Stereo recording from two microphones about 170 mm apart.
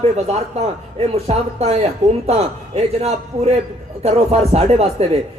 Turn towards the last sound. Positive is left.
turn(degrees=-40)  # may be behind; listen again after turning